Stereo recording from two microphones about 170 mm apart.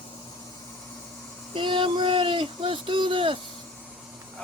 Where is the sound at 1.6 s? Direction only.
30° right (ahead or behind).